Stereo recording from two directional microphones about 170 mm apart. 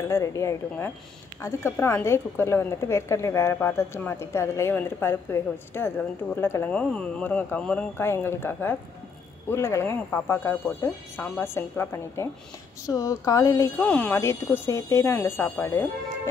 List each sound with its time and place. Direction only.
0.1 s a woman's voice: 20° left (ahead or behind)
13.8 s a woman's voice: 10° left (ahead or behind)